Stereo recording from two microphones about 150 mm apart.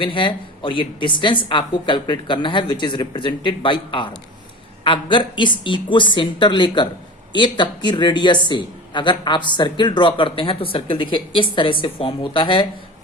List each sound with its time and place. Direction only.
0.0 s speech: 35° left (ahead or behind)